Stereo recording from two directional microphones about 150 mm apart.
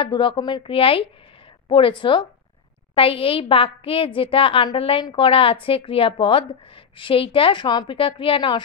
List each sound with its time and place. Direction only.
0.0 s a woman's voice: 35° left (ahead or behind)